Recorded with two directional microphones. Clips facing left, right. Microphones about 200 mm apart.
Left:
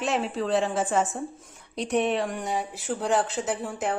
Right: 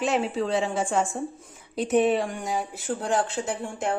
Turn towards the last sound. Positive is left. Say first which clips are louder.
# even
turn(degrees=0)  # may be behind; listen again after turning